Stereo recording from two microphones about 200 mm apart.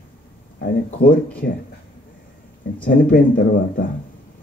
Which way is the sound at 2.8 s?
45° left (ahead or behind).